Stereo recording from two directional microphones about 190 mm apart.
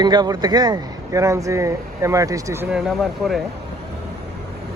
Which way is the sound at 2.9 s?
Centre (ahead or behind).